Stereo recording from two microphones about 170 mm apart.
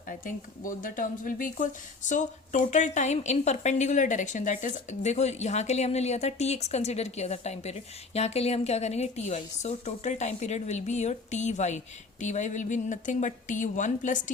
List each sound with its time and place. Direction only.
0.1 s speech: 50° left (ahead or behind)